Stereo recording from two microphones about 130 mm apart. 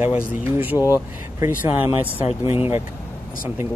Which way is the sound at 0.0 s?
15° right (ahead or behind).